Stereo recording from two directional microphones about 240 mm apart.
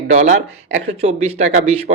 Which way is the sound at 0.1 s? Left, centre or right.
Right.